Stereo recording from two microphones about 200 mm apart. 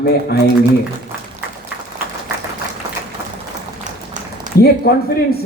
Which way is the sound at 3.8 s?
40° right (ahead or behind).